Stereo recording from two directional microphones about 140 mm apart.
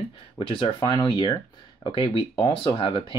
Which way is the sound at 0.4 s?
40° left (ahead or behind).